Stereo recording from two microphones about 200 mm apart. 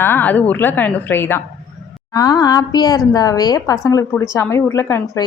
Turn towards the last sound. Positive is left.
turn(degrees=15)  # may be behind; listen again after turning